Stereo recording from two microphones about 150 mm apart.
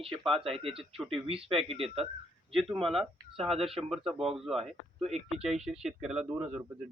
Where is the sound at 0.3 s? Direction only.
40° right (ahead or behind).